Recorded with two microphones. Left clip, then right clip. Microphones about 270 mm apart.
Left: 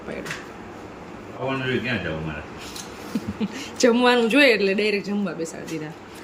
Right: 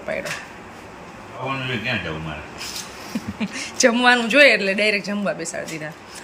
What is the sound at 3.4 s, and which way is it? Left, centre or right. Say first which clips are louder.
Speech: right 3 dB; centre.